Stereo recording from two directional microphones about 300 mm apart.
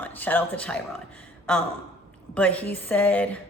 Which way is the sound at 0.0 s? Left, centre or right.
Centre.